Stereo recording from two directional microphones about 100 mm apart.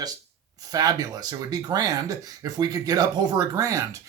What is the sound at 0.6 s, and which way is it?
Speech, 40° right (ahead or behind).